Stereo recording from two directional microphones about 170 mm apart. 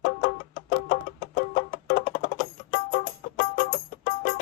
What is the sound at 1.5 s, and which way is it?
Music, 55° left (ahead or behind).